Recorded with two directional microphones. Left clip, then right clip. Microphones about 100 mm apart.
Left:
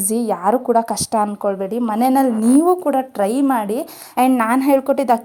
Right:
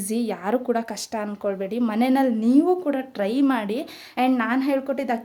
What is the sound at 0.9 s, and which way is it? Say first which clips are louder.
Speech: left 11 dB; 50° left (ahead or behind).